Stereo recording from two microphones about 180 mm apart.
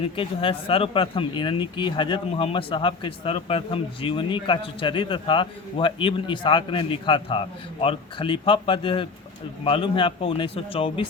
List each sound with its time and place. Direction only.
0.0 s speech: 30° left (ahead or behind)